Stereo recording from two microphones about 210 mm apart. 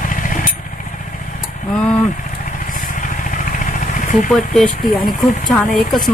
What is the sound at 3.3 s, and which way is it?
Vehicle, 40° left (ahead or behind).